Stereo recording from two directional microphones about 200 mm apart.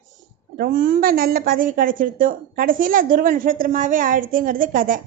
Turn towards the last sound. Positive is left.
turn(degrees=-45)  # may be behind; listen again after turning